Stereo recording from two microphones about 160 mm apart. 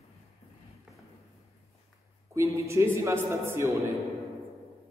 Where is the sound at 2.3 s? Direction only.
20° right (ahead or behind).